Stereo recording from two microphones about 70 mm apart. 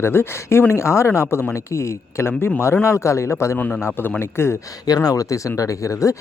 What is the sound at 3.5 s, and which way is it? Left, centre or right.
Speech, left.